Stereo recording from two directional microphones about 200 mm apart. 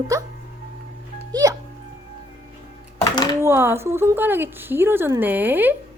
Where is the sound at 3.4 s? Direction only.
10° right (ahead or behind).